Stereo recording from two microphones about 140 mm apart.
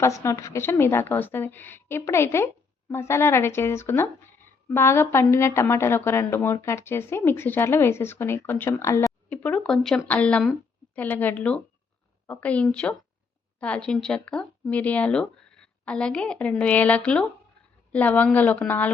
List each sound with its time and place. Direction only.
0.0 s a woman's voice: 20° left (ahead or behind)